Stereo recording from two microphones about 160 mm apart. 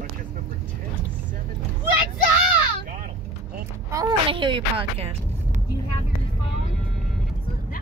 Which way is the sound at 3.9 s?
30° right (ahead or behind).